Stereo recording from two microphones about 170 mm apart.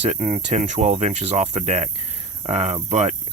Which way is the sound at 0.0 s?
45° right (ahead or behind).